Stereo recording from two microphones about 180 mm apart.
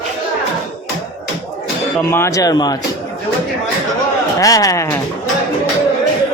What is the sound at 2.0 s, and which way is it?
Speech, 15° left (ahead or behind).